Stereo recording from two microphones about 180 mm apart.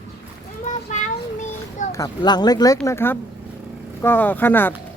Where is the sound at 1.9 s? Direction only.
20° left (ahead or behind).